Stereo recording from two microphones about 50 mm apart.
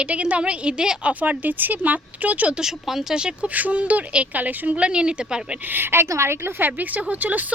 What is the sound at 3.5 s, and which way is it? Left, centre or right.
Speech, right.